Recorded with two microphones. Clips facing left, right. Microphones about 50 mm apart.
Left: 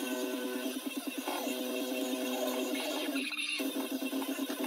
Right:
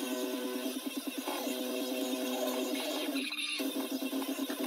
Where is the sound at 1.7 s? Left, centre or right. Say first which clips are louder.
Even; centre.